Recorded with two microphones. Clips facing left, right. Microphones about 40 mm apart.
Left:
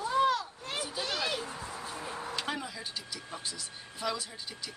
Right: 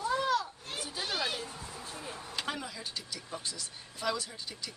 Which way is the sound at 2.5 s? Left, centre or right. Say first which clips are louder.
Left 2 dB; centre.